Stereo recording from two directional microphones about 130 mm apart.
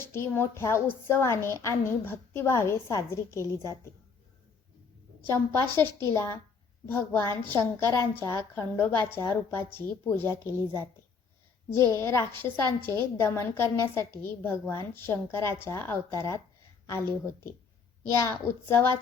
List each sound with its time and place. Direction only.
0.0 s a woman's voice: 20° left (ahead or behind)
5.2 s a woman's voice: 20° left (ahead or behind)
11.9 s a woman's voice: 20° left (ahead or behind)